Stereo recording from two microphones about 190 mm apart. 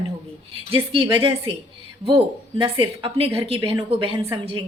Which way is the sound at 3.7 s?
15° right (ahead or behind).